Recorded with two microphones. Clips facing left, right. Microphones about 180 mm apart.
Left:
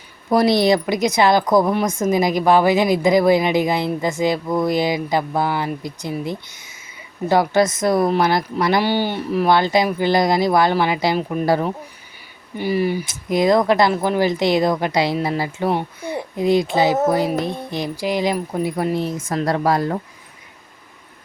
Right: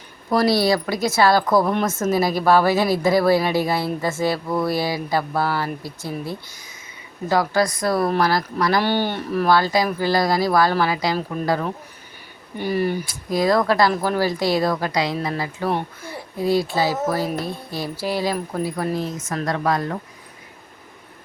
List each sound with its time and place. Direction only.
0.3 s a woman's voice: 20° left (ahead or behind)
12.5 s a woman's voice: 10° left (ahead or behind)
13.1 s a woman's voice: 20° left (ahead or behind)
19.1 s speech: 30° left (ahead or behind)